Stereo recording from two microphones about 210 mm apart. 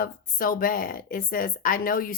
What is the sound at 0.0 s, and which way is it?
Speech, 45° left (ahead or behind).